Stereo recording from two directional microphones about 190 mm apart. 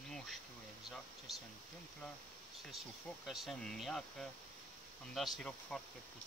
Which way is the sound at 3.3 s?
Centre (ahead or behind).